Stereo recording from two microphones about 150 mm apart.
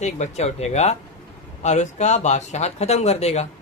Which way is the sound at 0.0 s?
50° left (ahead or behind).